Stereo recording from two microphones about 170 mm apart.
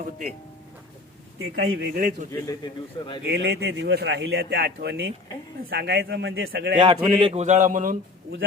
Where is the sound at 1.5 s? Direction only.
60° right (ahead or behind).